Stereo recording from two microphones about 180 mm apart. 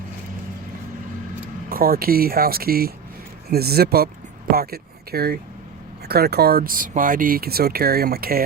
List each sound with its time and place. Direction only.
1.7 s speech: 55° right (ahead or behind)